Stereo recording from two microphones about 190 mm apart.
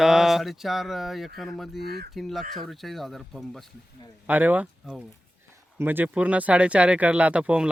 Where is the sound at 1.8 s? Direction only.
55° right (ahead or behind).